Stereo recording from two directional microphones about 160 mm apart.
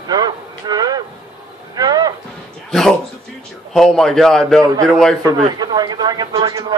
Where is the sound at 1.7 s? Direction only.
25° right (ahead or behind).